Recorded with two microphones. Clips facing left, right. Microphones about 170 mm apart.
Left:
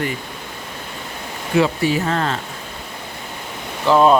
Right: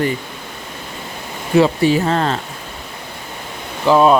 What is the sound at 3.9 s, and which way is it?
Speech, 10° right (ahead or behind).